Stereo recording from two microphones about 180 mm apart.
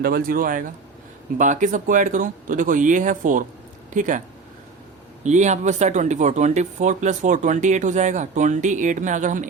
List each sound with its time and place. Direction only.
0.0 s speech: 55° right (ahead or behind)
5.2 s speech: 40° right (ahead or behind)